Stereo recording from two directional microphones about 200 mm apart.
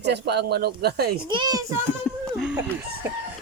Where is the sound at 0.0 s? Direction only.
55° right (ahead or behind).